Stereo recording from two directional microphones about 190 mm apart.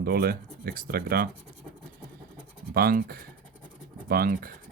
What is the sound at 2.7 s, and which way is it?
Speech, 50° right (ahead or behind).